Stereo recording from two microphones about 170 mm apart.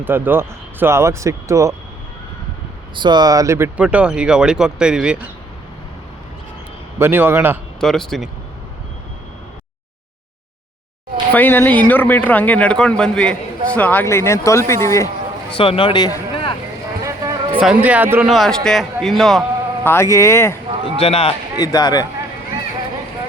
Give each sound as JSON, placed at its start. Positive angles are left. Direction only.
{"t": 0.0, "sound": "speech", "side_deg": -10}
{"t": 2.9, "sound": "speech", "side_deg": -25}
{"t": 7.0, "sound": "speech", "side_deg": -10}
{"t": 7.8, "sound": "a man's voice", "side_deg": 0}
{"t": 11.3, "sound": "a man's voice", "side_deg": 10}
{"t": 15.5, "sound": "speech", "side_deg": 30}
{"t": 17.0, "sound": "a sound", "side_deg": -20}
{"t": 17.6, "sound": "a man's voice", "side_deg": -5}
{"t": 19.8, "sound": "a man's voice", "side_deg": 15}
{"t": 20.7, "sound": "a sound", "side_deg": -30}
{"t": 21.0, "sound": "a man's voice", "side_deg": 35}
{"t": 21.6, "sound": "speech", "side_deg": 20}